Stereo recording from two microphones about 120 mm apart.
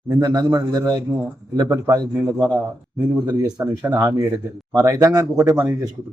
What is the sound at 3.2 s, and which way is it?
A man's voice, 30° right (ahead or behind).